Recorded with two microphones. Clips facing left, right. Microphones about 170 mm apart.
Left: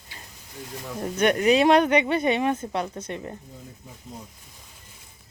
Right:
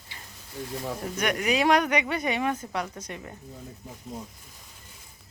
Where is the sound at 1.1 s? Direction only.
30° left (ahead or behind).